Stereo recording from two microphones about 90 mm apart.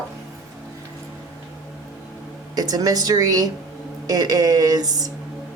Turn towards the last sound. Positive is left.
turn(degrees=-45)  # may be behind; listen again after turning